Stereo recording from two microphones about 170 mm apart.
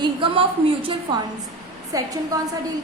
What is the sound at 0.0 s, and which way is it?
Speech, 30° right (ahead or behind).